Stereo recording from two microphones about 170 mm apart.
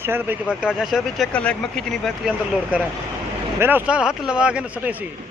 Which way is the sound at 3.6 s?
10° right (ahead or behind).